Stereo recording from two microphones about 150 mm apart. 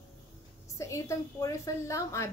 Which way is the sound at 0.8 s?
20° left (ahead or behind).